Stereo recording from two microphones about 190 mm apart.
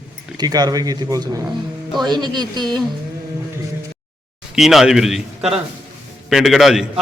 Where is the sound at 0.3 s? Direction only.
20° right (ahead or behind).